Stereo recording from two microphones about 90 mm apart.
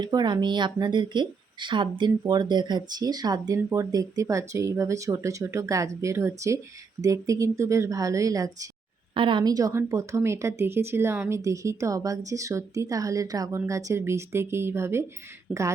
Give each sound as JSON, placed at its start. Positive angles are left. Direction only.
{"t": 0.0, "sound": "speech", "side_deg": -55}
{"t": 9.1, "sound": "a woman's voice", "side_deg": -70}
{"t": 9.4, "sound": "speech", "side_deg": -45}
{"t": 9.7, "sound": "speech", "side_deg": -35}
{"t": 15.5, "sound": "speech", "side_deg": -5}